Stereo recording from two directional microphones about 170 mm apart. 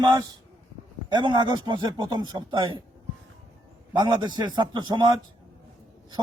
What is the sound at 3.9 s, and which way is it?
A man's voice, 25° right (ahead or behind).